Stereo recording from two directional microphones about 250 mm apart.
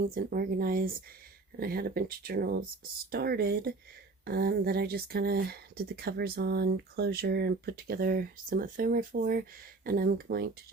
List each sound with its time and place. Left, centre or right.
0.0 s speech: right